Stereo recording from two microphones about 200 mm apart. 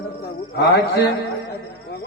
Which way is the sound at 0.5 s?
55° left (ahead or behind).